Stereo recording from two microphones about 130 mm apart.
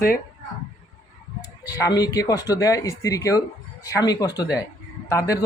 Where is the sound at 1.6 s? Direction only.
25° left (ahead or behind).